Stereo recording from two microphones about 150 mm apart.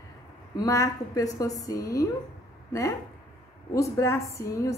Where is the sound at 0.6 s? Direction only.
20° left (ahead or behind).